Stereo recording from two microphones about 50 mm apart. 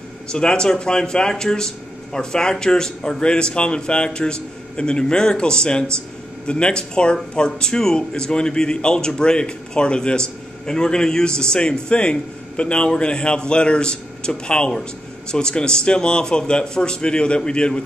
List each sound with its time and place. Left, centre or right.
0.3 s speech: centre